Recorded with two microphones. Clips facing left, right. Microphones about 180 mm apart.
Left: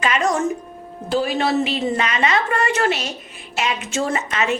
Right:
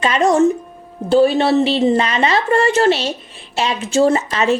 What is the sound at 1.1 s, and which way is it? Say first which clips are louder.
A woman's voice: right 7 dB; 30° right (ahead or behind).